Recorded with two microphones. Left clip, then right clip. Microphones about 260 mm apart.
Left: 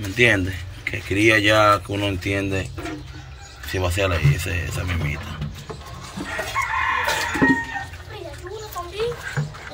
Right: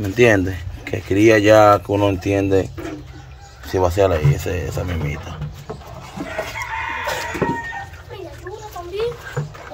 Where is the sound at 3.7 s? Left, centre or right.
Centre.